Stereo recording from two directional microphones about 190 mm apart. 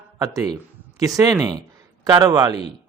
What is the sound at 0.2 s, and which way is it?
A man's voice, 20° right (ahead or behind).